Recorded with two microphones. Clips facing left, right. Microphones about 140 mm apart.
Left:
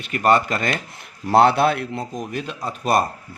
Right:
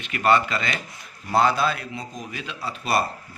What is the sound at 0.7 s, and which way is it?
Speech, 65° left (ahead or behind).